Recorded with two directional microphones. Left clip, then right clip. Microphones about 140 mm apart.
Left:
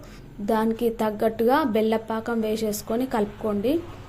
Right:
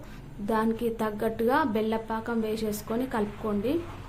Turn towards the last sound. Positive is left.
turn(degrees=35)  # may be behind; listen again after turning